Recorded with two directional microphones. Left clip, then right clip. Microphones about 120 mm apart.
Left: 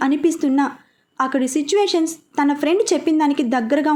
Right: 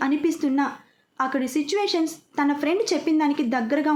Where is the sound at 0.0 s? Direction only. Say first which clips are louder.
Left 5 dB; 35° left (ahead or behind).